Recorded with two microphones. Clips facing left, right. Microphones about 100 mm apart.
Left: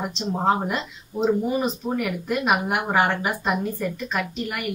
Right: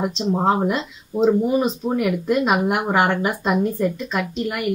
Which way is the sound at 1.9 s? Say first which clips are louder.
Right 5 dB; 25° right (ahead or behind).